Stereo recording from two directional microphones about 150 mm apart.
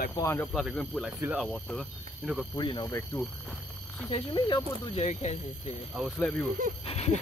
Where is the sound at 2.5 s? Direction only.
35° left (ahead or behind).